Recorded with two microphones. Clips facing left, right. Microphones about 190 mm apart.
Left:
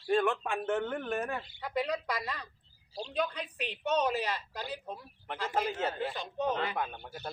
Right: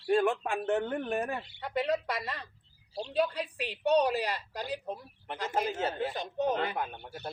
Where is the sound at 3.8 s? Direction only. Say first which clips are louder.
Right 4 dB; 35° right (ahead or behind).